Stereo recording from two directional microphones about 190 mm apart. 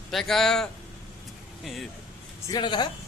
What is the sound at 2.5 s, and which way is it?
Speech, 25° left (ahead or behind).